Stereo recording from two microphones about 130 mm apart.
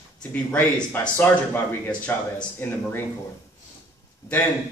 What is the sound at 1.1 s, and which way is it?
Speech, 15° left (ahead or behind).